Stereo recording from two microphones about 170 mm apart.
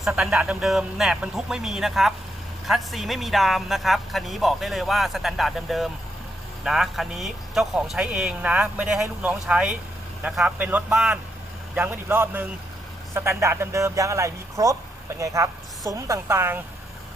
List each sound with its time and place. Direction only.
0.0 s speech: 5° right (ahead or behind)